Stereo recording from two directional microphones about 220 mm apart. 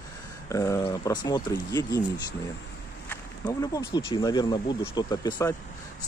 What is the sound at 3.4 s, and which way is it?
Speech, 15° left (ahead or behind).